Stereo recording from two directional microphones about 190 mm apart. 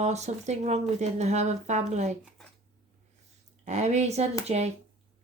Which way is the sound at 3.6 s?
35° right (ahead or behind).